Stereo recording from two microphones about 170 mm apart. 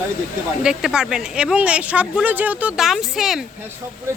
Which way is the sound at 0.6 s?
5° right (ahead or behind).